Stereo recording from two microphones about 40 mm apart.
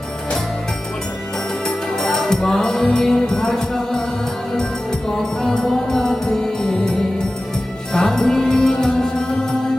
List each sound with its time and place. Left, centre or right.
1.6 s music: centre
5.1 s music: centre
7.9 s music: centre